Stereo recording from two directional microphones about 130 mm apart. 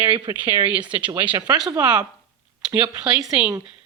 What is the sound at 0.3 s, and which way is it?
Speech, 25° right (ahead or behind).